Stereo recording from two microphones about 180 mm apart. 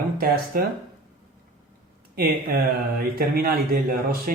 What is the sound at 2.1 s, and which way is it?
Speech, 55° right (ahead or behind).